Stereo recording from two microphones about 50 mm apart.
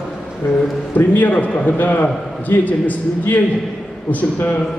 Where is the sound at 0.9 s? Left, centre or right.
Left.